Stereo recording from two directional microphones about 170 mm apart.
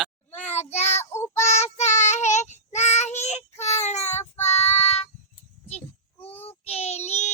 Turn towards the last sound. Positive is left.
turn(degrees=40)  # may be behind; listen again after turning